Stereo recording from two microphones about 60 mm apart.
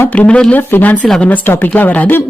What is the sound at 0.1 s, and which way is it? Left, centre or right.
Speech, left.